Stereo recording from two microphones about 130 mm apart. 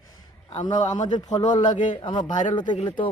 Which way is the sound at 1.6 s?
75° left (ahead or behind).